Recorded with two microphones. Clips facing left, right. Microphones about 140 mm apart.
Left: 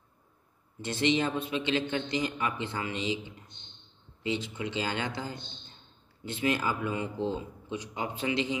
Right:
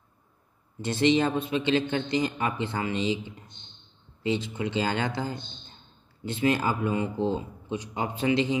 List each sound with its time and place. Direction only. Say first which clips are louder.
0.8 s a man's voice: right 5 dB; 35° right (ahead or behind)
4.2 s a man's voice: right 4 dB; 35° right (ahead or behind)
6.2 s a man's voice: right 4 dB; 30° right (ahead or behind)